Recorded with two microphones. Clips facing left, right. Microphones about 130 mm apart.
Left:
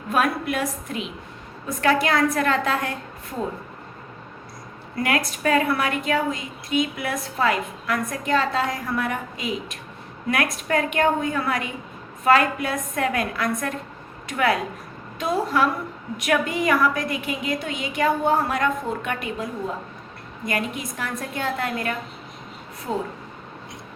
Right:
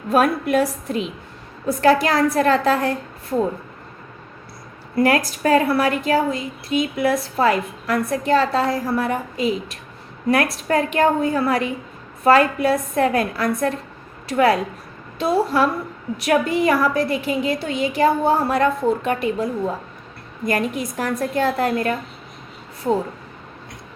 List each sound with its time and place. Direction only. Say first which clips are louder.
0.1 s a woman's voice: right 5 dB; 40° right (ahead or behind)
4.9 s a woman's voice: right 6 dB; 35° right (ahead or behind)
20.5 s a woman's voice: right 5 dB; 40° right (ahead or behind)